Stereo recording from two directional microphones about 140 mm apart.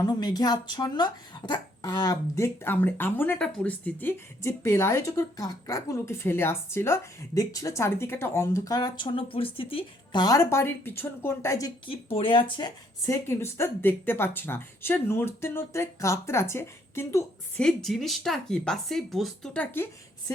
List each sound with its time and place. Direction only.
0.0 s speech: 30° left (ahead or behind)
11.9 s speech: 40° left (ahead or behind)
13.2 s speech: 15° left (ahead or behind)
17.6 s speech: 5° left (ahead or behind)
19.7 s a woman's voice: 15° left (ahead or behind)